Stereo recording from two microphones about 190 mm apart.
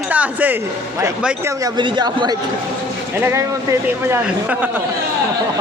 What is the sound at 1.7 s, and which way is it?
Speech, 25° right (ahead or behind).